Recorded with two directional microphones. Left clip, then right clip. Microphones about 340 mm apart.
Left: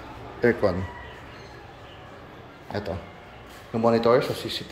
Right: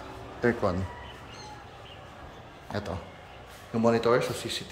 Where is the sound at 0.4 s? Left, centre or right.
Centre.